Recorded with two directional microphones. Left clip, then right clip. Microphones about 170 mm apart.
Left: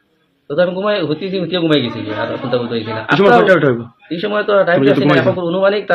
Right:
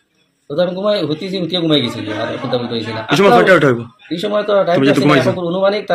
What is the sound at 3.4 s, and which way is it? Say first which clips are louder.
Speech: right 1 dB; 15° right (ahead or behind).